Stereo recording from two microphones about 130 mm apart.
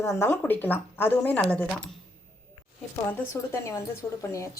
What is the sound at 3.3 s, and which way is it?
Speech, 25° left (ahead or behind).